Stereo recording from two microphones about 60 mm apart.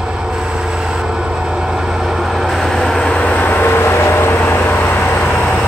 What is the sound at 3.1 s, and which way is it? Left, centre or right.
Vehicle, left.